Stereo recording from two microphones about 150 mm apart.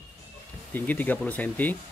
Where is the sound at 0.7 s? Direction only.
10° left (ahead or behind).